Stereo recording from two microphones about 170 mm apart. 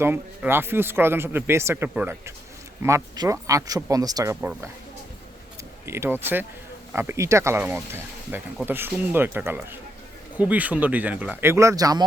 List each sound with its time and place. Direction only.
0.0 s speech: 15° right (ahead or behind)
5.8 s speech: 15° right (ahead or behind)